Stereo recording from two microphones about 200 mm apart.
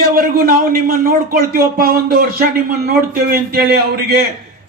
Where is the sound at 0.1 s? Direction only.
45° right (ahead or behind).